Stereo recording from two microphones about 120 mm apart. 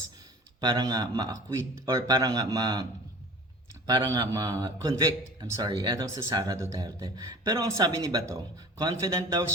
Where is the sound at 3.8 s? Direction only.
30° right (ahead or behind).